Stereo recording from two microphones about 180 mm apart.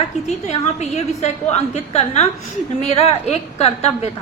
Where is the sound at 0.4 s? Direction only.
35° left (ahead or behind).